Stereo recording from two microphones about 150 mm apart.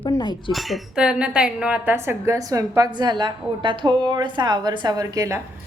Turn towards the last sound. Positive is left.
turn(degrees=-20)  # may be behind; listen again after turning